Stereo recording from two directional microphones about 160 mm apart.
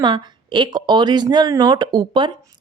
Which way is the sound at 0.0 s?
30° right (ahead or behind).